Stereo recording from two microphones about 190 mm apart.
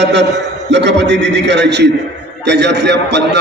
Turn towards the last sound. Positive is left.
turn(degrees=-65)  # may be behind; listen again after turning